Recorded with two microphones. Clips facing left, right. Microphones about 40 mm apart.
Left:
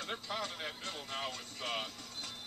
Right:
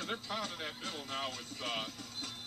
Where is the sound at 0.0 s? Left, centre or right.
Centre.